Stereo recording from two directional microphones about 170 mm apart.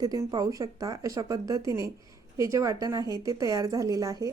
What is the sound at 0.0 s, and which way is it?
A woman's voice, 20° right (ahead or behind).